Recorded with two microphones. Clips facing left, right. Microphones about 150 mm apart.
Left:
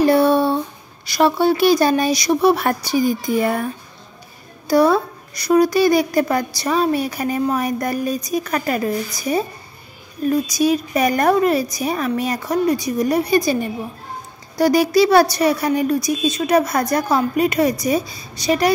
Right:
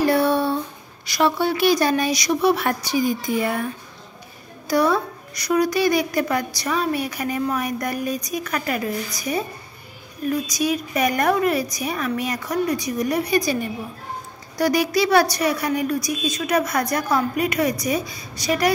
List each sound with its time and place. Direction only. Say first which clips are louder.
0.0 s a sound: left 4 dB; 25° left (ahead or behind)
1.0 s a woman's voice: left 5 dB; 30° left (ahead or behind)
4.6 s a woman's voice: left 5 dB; 30° left (ahead or behind)
14.6 s a woman's voice: left 5 dB; 30° left (ahead or behind)